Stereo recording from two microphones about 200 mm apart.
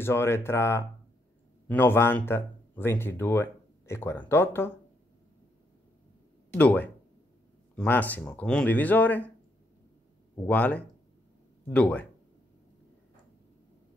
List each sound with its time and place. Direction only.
0.0 s speech: 10° left (ahead or behind)
6.5 s speech: 10° left (ahead or behind)
10.3 s speech: 10° left (ahead or behind)